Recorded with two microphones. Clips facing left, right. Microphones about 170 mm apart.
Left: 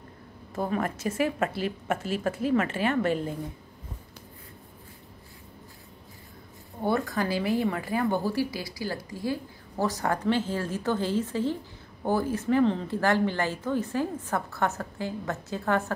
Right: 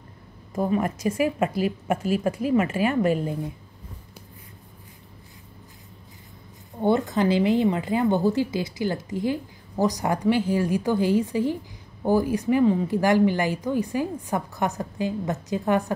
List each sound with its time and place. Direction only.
0.6 s speech: 10° right (ahead or behind)
6.8 s speech: 20° right (ahead or behind)